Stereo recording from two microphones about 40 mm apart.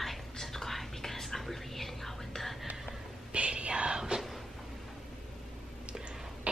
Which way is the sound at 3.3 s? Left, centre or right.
Right.